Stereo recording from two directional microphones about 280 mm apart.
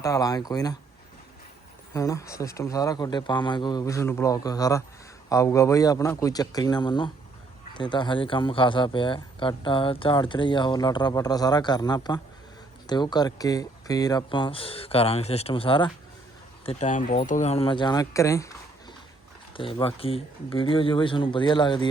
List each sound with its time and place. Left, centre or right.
0.0 s speech: centre
1.9 s speech: centre
19.5 s speech: centre